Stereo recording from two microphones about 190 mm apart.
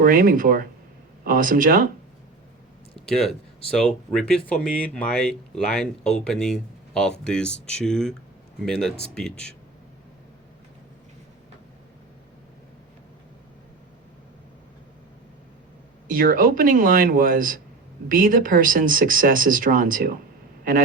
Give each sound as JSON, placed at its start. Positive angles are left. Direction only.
{"t": 0.0, "sound": "speech", "side_deg": -50}
{"t": 3.1, "sound": "speech", "side_deg": 0}
{"t": 16.0, "sound": "speech", "side_deg": -50}